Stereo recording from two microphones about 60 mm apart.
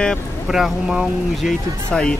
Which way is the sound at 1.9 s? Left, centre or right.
Centre.